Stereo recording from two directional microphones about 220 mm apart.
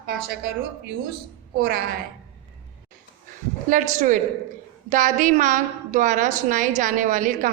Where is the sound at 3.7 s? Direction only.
35° right (ahead or behind).